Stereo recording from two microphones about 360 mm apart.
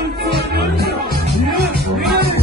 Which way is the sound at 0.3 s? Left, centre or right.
Right.